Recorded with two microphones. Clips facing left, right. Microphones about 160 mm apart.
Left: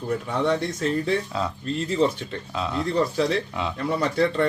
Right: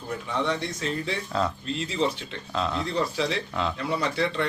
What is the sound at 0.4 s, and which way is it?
Speech, 50° left (ahead or behind).